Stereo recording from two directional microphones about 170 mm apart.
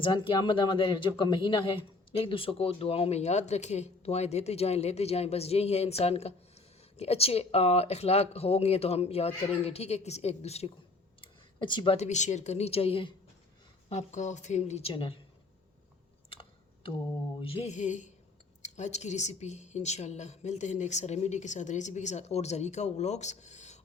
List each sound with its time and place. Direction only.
0.0 s speech: 30° left (ahead or behind)
11.2 s a sound: 30° left (ahead or behind)
11.9 s speech: 45° left (ahead or behind)
13.9 s speech: 45° left (ahead or behind)
16.3 s typing: 30° left (ahead or behind)
17.4 s speech: 35° left (ahead or behind)